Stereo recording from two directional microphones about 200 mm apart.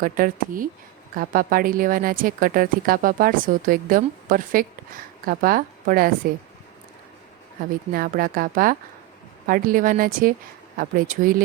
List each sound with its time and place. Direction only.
0.0 s a woman's voice: 45° right (ahead or behind)
7.9 s speech: 45° right (ahead or behind)